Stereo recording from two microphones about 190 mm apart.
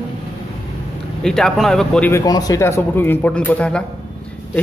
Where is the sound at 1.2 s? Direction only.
Centre (ahead or behind).